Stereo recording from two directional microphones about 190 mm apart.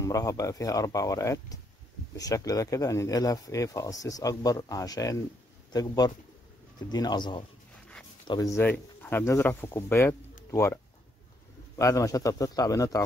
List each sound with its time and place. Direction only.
0.0 s speech: 15° left (ahead or behind)
11.8 s speech: 15° left (ahead or behind)